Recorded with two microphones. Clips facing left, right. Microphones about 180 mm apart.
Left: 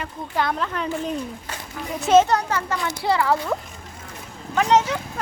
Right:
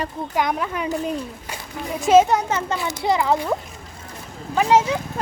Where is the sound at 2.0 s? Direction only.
10° right (ahead or behind).